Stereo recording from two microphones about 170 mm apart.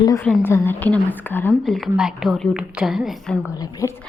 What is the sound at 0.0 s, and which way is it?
A woman's voice, 20° left (ahead or behind).